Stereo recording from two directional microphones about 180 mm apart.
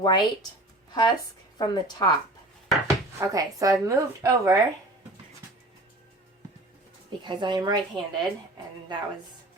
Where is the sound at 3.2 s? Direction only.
20° right (ahead or behind).